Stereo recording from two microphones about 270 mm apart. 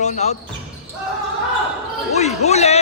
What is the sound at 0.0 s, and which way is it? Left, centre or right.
Speech, left.